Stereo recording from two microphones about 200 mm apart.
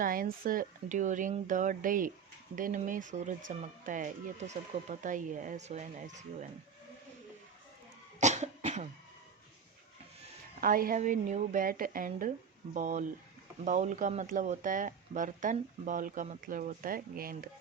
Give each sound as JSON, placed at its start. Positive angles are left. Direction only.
{"t": 0.0, "sound": "speech", "side_deg": -45}
{"t": 8.2, "sound": "cough", "side_deg": -35}
{"t": 10.6, "sound": "speech", "side_deg": -45}